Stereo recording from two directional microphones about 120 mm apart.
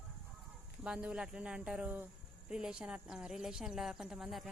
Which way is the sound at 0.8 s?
10° right (ahead or behind).